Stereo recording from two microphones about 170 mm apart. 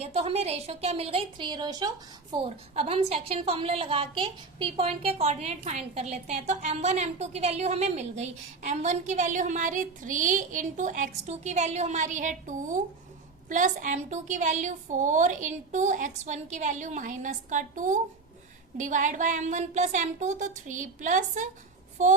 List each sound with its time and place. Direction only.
0.0 s a woman's voice: 40° right (ahead or behind)